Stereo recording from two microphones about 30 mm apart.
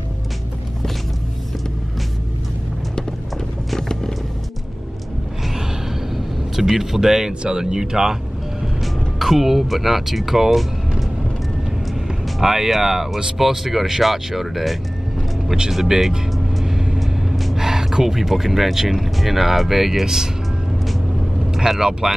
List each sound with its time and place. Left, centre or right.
6.1 s speech: centre
9.2 s speech: centre
11.9 s vehicle: centre
13.4 s speech: centre
15.4 s speech: right
15.7 s speech: centre
16.6 s vehicle: centre
17.0 s gasp: centre
17.6 s speech: centre
21.5 s speech: centre